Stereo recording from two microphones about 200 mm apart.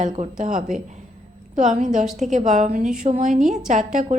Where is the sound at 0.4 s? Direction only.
40° right (ahead or behind).